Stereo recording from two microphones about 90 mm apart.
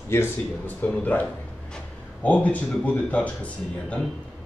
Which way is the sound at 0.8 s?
20° left (ahead or behind).